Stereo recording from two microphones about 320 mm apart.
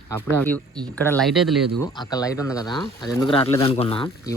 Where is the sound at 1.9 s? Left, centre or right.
Centre.